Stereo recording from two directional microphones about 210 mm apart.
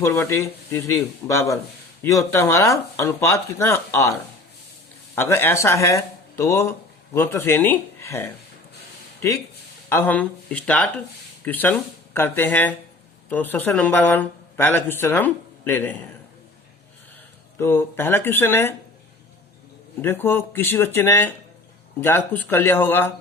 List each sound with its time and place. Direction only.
0.0 s speech: 10° left (ahead or behind)
9.9 s speech: 10° left (ahead or behind)
17.6 s speech: 10° left (ahead or behind)
20.0 s speech: 10° left (ahead or behind)